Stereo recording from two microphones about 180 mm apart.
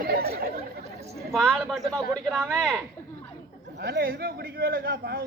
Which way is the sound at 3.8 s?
60° right (ahead or behind).